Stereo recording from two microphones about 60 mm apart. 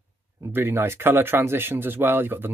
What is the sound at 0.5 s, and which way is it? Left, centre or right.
Speech, right.